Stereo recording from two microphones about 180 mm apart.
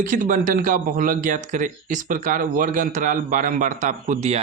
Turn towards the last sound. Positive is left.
turn(degrees=-40)  # may be behind; listen again after turning